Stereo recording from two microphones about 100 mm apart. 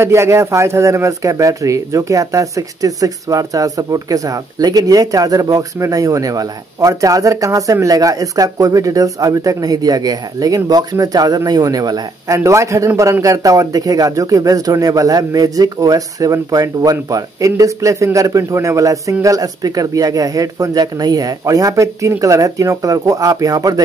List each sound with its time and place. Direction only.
0.0 s speech: 30° right (ahead or behind)